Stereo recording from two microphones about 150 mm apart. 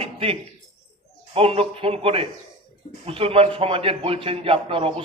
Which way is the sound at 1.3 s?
40° right (ahead or behind).